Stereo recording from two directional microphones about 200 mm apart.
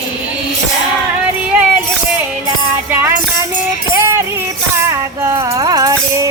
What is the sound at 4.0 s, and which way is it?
Music, 15° right (ahead or behind).